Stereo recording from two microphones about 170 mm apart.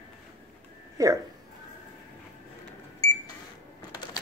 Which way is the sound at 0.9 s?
20° right (ahead or behind).